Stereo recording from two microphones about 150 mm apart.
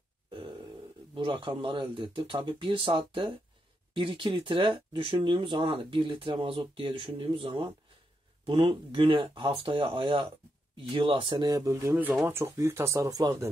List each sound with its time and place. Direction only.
1.1 s speech: 35° right (ahead or behind)